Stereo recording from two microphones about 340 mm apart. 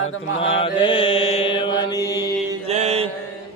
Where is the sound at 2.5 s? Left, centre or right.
Centre.